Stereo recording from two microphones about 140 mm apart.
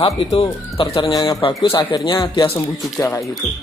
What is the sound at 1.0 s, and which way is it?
Speech, 25° left (ahead or behind).